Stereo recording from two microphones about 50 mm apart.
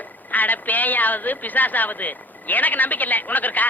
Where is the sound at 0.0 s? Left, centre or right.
Left.